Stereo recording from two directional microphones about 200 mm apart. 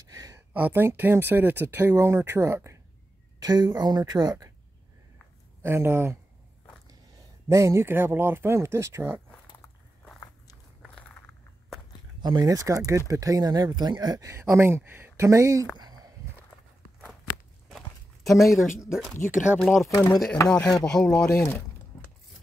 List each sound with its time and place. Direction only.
0.1 s a sound: 15° right (ahead or behind)
0.5 s speech: 10° right (ahead or behind)
5.6 s speech: 10° right (ahead or behind)
7.4 s speech: 15° right (ahead or behind)
10.2 s biting: 20° left (ahead or behind)
12.2 s speech: 20° right (ahead or behind)
15.8 s a sound: 20° right (ahead or behind)
17.6 s a sound: centre (ahead or behind)
18.9 s speech: centre (ahead or behind)
19.1 s speech: 40° left (ahead or behind)
19.4 s speech: 5° right (ahead or behind)
19.9 s speech: 20° left (ahead or behind)
20.4 s speech: centre (ahead or behind)
21.9 s keys jangling: 10° left (ahead or behind)